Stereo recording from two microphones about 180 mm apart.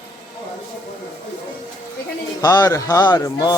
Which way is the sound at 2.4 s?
20° left (ahead or behind).